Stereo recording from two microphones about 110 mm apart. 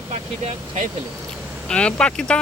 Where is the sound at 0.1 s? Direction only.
80° right.